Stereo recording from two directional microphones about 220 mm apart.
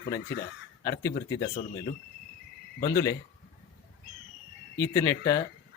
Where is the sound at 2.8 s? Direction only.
15° left (ahead or behind).